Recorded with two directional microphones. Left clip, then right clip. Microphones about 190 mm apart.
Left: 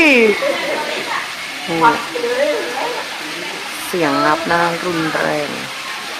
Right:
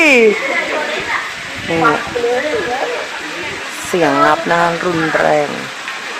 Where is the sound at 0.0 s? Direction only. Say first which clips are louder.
Right 2 dB; 20° right (ahead or behind).